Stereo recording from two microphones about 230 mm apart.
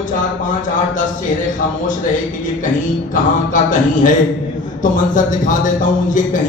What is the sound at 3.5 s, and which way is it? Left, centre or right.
A man's voice, left.